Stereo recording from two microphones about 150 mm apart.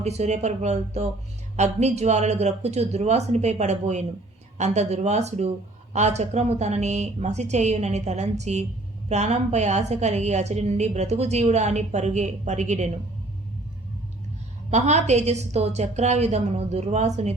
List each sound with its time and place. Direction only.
0.0 s a woman's voice: 45° right (ahead or behind)
14.7 s a woman's voice: 50° right (ahead or behind)